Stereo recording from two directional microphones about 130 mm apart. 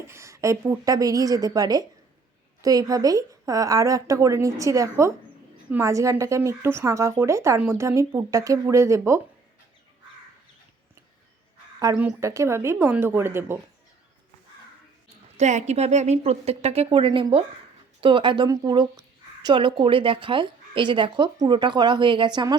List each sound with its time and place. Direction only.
0.1 s speech: 20° right (ahead or behind)
11.9 s speech: 25° right (ahead or behind)
15.4 s a woman's voice: 60° right (ahead or behind); by 22.5 s 35° right (ahead or behind)